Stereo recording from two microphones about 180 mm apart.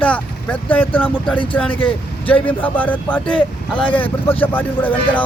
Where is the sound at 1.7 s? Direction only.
30° left (ahead or behind).